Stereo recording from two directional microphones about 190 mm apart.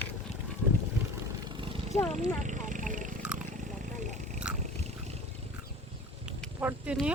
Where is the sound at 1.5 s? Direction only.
25° right (ahead or behind).